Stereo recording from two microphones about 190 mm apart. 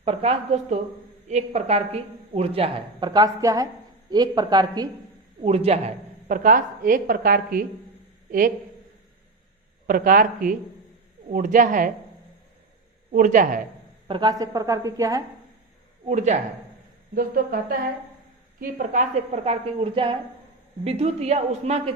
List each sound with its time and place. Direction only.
0.0 s a woman's voice: 30° right (ahead or behind)
5.4 s a woman's voice: 30° right (ahead or behind)
9.8 s a woman's voice: 50° right (ahead or behind)
13.1 s a woman's voice: 45° right (ahead or behind)
14.1 s a woman's voice: 20° right (ahead or behind)
16.0 s a woman's voice: 40° right (ahead or behind)
17.2 s a woman's voice: 50° right (ahead or behind); by 21.9 s 35° right (ahead or behind)